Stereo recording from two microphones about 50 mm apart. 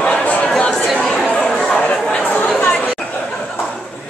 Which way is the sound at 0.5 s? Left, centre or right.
Centre.